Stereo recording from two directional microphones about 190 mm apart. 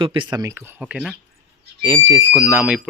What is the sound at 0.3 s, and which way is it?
Speech, 15° right (ahead or behind).